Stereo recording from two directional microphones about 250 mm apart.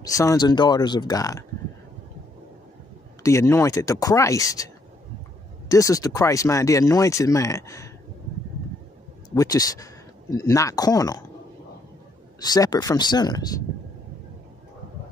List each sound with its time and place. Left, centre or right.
0.0 s speech: centre
3.2 s speech: centre
5.7 s speech: centre
9.3 s speech: centre
12.4 s speech: centre